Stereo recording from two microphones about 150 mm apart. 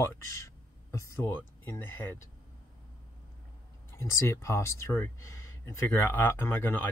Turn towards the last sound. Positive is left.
turn(degrees=15)  # may be behind; listen again after turning